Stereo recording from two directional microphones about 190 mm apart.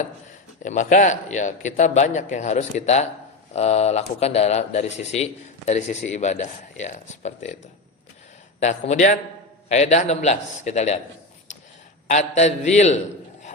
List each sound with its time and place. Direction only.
0.6 s a man's voice: 40° left (ahead or behind)
8.6 s a man's voice: 40° left (ahead or behind)
12.0 s a man's voice: 40° left (ahead or behind)